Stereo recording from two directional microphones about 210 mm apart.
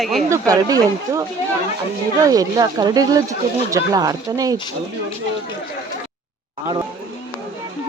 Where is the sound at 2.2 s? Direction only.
15° right (ahead or behind).